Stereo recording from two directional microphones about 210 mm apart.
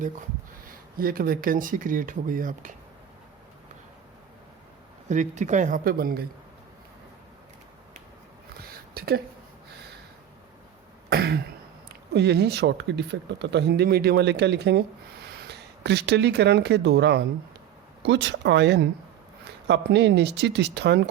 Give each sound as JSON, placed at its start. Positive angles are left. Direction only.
{"t": 0.9, "sound": "speech", "side_deg": -45}
{"t": 5.0, "sound": "speech", "side_deg": -35}
{"t": 8.6, "sound": "a sound", "side_deg": -45}
{"t": 11.1, "sound": "throat clearing", "side_deg": -50}
{"t": 12.1, "sound": "speech", "side_deg": -50}